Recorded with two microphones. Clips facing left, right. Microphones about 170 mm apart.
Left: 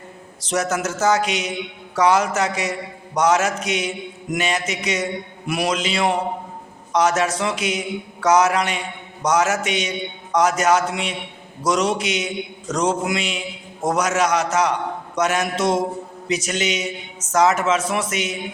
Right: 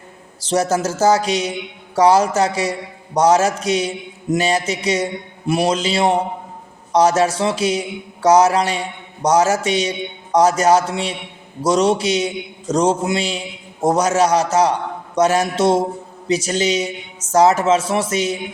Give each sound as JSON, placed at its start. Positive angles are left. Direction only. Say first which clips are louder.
{"t": 0.4, "sound": "a man's voice", "louder": "right 4 dB", "side_deg": -30}